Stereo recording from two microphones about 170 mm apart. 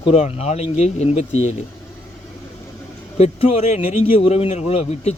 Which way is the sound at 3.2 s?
40° left (ahead or behind).